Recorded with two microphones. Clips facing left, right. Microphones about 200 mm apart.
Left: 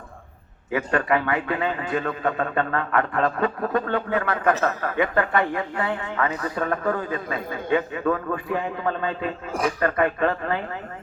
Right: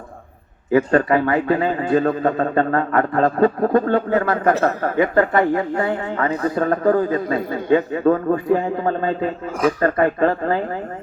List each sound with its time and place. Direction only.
0.7 s a man's voice: 35° right (ahead or behind)